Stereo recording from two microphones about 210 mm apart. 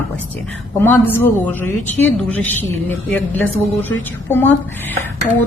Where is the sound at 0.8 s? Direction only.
10° left (ahead or behind).